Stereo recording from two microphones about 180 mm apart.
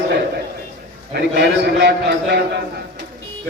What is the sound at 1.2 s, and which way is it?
Speech, 75° right (ahead or behind).